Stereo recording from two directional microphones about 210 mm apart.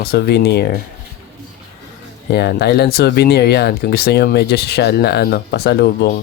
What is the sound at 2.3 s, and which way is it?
Speech, 50° left (ahead or behind).